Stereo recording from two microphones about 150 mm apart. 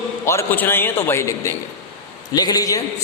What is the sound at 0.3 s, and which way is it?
A man's voice, 15° left (ahead or behind).